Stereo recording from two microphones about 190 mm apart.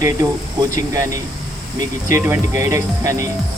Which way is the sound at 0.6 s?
15° right (ahead or behind).